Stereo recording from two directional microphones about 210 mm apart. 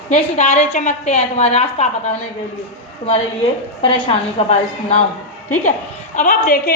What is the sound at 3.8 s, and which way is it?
Speech, 30° left (ahead or behind).